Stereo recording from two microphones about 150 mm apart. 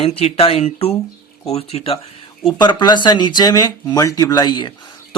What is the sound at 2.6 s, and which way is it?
Speech, 30° left (ahead or behind).